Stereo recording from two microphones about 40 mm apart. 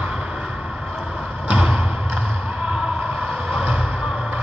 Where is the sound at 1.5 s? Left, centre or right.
Right.